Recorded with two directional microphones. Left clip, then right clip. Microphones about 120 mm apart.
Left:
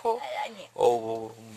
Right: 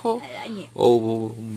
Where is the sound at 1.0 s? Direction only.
15° left (ahead or behind).